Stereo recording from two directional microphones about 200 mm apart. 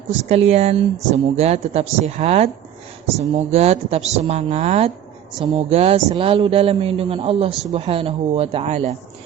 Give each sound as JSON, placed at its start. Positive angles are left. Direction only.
{"t": 0.2, "sound": "a man's voice", "side_deg": -35}